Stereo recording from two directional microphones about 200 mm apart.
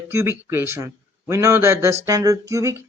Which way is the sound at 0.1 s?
10° right (ahead or behind).